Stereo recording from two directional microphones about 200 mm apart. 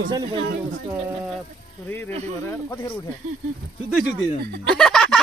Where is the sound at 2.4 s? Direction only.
10° left (ahead or behind).